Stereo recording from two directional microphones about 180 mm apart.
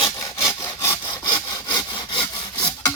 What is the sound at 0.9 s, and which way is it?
Sawing, 25° left (ahead or behind).